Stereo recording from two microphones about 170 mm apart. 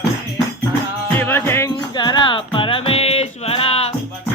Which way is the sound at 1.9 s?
25° left (ahead or behind).